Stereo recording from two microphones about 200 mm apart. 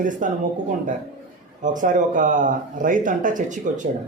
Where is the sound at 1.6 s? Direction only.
40° right (ahead or behind).